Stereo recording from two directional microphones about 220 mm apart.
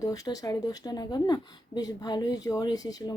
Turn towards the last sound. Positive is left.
turn(degrees=15)  # may be behind; listen again after turning